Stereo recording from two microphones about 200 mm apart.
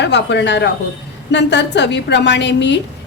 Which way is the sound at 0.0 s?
60° left (ahead or behind).